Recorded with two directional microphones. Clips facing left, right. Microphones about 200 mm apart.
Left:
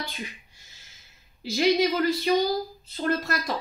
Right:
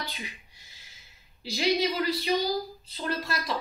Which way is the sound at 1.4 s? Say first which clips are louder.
Left 4 dB; 50° left (ahead or behind).